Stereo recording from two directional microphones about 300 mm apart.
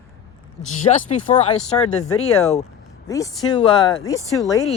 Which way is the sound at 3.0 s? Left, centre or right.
Centre.